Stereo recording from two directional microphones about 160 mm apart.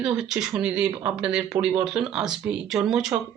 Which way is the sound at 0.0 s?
5° right (ahead or behind).